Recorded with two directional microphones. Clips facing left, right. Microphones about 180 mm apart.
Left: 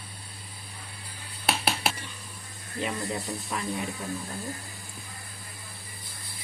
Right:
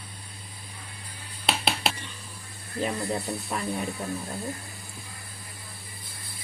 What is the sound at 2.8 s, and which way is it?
Speech, 35° right (ahead or behind).